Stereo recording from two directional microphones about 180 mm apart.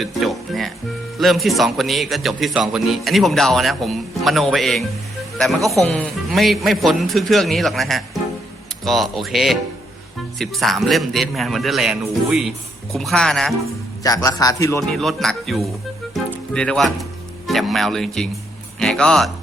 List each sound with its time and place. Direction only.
0.0 s music: centre (ahead or behind)
1.2 s speech: centre (ahead or behind)
14.0 s a man's voice: 20° left (ahead or behind)
14.9 s speech: centre (ahead or behind)